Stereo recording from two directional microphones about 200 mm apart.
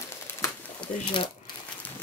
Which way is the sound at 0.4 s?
20° left (ahead or behind).